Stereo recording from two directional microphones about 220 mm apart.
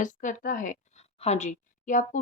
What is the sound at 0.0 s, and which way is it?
Speech, 35° left (ahead or behind).